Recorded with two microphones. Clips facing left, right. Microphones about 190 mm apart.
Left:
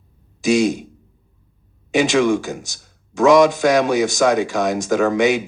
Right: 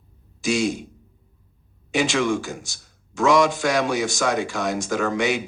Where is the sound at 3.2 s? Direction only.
20° left (ahead or behind).